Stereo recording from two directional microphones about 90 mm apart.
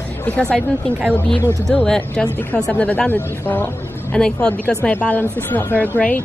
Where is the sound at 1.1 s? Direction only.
10° left (ahead or behind).